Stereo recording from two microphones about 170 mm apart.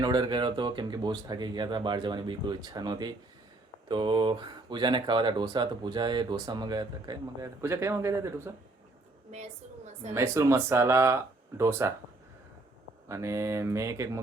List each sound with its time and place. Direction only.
0.0 s speech: 25° right (ahead or behind)
9.3 s a sound: 40° right (ahead or behind)
10.1 s speech: 15° right (ahead or behind)
13.1 s speech: 15° right (ahead or behind)